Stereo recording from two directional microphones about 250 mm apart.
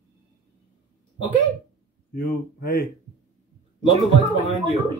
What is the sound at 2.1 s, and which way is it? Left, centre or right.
Speech, left.